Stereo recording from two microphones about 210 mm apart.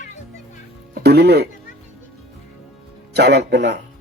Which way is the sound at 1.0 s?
50° right (ahead or behind).